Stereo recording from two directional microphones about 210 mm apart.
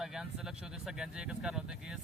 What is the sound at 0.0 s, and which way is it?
Speech, centre (ahead or behind).